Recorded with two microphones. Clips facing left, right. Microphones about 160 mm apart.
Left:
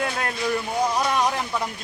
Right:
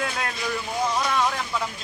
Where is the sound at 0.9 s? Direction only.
15° left (ahead or behind).